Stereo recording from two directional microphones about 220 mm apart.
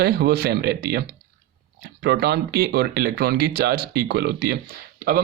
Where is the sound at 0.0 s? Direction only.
45° right (ahead or behind).